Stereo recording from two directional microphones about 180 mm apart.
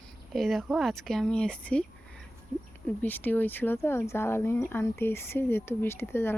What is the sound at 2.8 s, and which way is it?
Speech, 10° left (ahead or behind).